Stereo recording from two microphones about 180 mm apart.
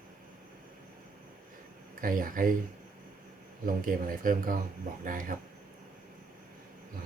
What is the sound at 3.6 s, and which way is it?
Speech, 50° right (ahead or behind).